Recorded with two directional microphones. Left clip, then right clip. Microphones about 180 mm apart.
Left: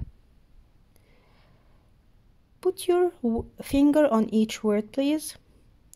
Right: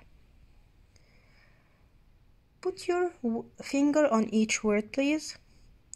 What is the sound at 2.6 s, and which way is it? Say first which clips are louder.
Speech: left 6 dB; 25° left (ahead or behind).